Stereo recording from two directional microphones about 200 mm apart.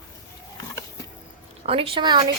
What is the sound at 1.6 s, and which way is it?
Speech, 30° right (ahead or behind).